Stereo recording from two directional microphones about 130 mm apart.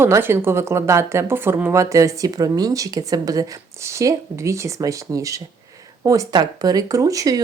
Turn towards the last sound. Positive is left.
turn(degrees=-25)  # may be behind; listen again after turning